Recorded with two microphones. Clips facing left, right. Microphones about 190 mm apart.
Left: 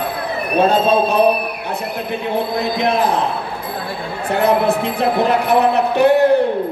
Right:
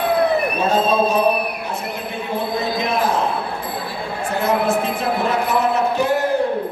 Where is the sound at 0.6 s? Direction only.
65° left (ahead or behind).